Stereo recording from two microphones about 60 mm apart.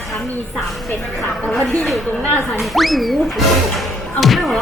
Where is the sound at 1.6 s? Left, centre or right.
Centre.